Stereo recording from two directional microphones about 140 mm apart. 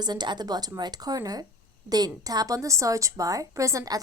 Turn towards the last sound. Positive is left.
turn(degrees=-25)  # may be behind; listen again after turning